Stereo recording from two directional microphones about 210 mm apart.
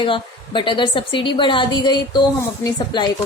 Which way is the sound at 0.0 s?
25° left (ahead or behind).